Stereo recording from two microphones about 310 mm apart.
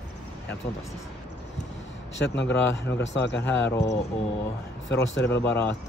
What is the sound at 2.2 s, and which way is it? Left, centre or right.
A man's voice, left.